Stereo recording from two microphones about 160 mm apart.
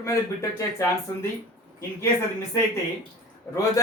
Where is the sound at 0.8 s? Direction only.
20° left (ahead or behind).